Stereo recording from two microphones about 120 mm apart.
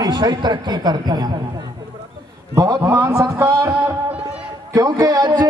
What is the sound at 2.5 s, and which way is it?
A man's voice, 25° right (ahead or behind).